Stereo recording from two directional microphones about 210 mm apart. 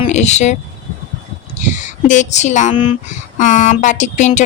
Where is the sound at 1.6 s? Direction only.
35° left (ahead or behind).